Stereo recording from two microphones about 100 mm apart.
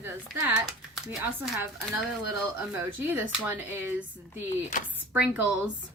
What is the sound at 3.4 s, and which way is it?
A woman's voice, 20° right (ahead or behind).